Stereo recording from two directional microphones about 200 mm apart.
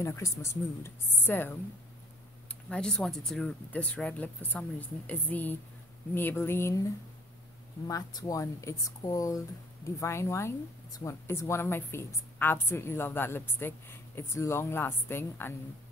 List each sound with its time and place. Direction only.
0.0 s speech: 15° left (ahead or behind)
2.7 s speech: 5° left (ahead or behind)